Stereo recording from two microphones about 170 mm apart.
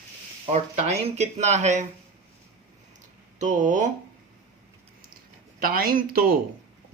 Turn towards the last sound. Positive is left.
turn(degrees=-60)  # may be behind; listen again after turning